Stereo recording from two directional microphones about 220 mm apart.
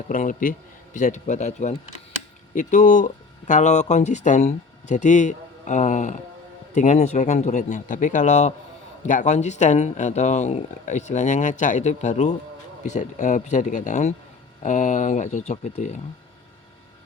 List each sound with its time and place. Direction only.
0.1 s speech: 35° left (ahead or behind)